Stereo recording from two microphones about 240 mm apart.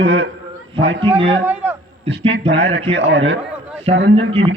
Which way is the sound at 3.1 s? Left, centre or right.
Right.